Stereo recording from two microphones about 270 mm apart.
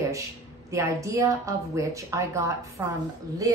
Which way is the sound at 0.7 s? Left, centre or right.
Centre.